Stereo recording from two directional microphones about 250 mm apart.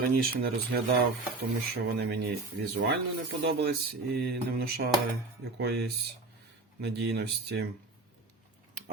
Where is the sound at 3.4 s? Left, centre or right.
Right.